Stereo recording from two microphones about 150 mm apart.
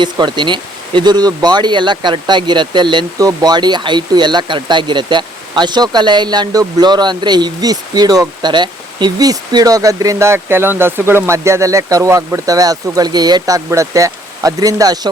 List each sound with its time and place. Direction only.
0.0 s speech: 30° right (ahead or behind)